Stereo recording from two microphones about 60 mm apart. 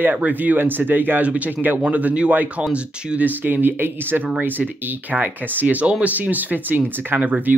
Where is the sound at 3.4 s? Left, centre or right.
Right.